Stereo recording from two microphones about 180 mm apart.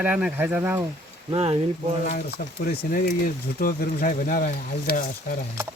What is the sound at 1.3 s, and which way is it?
Speech, 35° right (ahead or behind).